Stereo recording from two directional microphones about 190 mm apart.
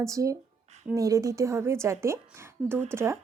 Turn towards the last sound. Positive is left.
turn(degrees=-15)  # may be behind; listen again after turning